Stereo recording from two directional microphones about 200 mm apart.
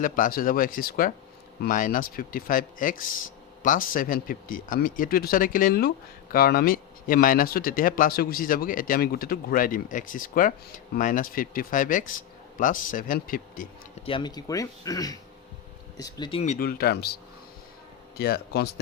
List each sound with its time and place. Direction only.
0.0 s speech: 45° left (ahead or behind)
14.0 s speech: 25° left (ahead or behind)
16.4 s speech: 35° left (ahead or behind)
16.6 s speech: 50° left (ahead or behind)
18.2 s speech: 50° left (ahead or behind)